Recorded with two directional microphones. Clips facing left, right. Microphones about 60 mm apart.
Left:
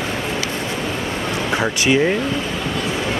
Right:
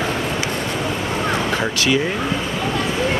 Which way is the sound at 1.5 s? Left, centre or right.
Left.